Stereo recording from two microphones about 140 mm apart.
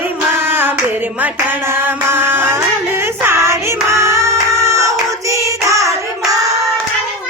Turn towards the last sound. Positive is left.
turn(degrees=-25)  # may be behind; listen again after turning